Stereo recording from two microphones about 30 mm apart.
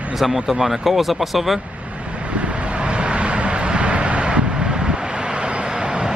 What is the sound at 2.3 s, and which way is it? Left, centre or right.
Vehicle, right.